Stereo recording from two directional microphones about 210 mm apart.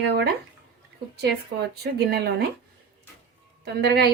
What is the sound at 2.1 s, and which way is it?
Speech, 50° right (ahead or behind).